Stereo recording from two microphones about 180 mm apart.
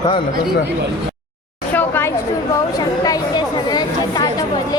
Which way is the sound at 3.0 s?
20° left (ahead or behind).